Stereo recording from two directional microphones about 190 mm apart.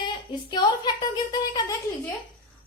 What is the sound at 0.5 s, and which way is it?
A woman's voice, 20° left (ahead or behind).